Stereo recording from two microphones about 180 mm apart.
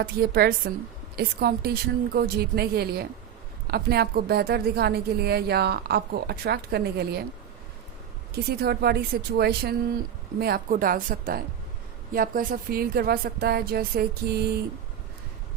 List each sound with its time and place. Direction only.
0.0 s a woman's voice: 60° right (ahead or behind)
8.3 s a woman's voice: 60° right (ahead or behind)